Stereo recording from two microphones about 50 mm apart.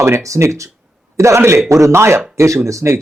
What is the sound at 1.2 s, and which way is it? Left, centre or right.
Speech, right.